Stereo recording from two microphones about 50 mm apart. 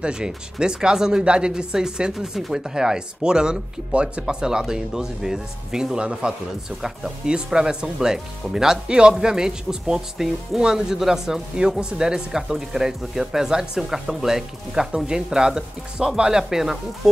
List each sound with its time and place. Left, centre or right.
0.0 s speech: centre